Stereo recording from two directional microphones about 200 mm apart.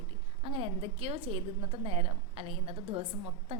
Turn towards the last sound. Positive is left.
turn(degrees=-30)  # may be behind; listen again after turning